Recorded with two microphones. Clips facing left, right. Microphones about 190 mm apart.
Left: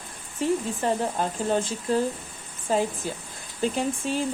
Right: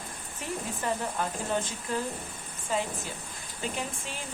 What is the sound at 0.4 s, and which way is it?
Speech, 30° left (ahead or behind).